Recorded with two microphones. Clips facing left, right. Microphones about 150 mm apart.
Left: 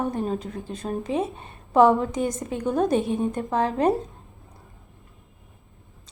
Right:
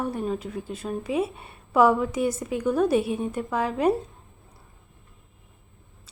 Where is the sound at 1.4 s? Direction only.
30° left (ahead or behind).